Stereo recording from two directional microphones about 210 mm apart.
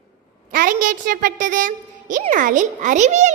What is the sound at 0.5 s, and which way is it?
A child's voice, 40° right (ahead or behind).